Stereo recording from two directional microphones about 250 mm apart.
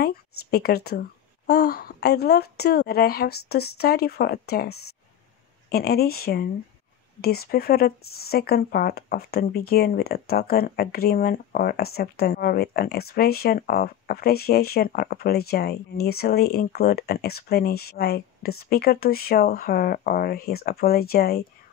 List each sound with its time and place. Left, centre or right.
0.0 s speech: left